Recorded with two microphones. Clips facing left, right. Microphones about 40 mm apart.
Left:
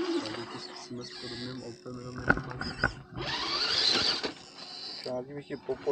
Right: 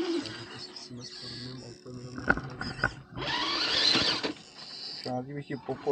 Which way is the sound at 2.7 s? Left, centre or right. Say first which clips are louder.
Even; centre.